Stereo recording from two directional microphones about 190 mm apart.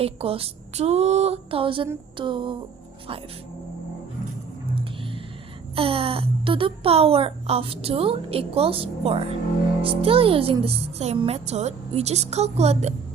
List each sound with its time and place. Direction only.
0.0 s a woman's voice: 30° right (ahead or behind)
4.7 s music: 30° right (ahead or behind)
5.7 s a woman's voice: 30° right (ahead or behind)